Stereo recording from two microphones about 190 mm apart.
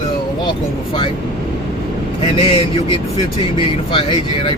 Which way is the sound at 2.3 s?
30° left (ahead or behind).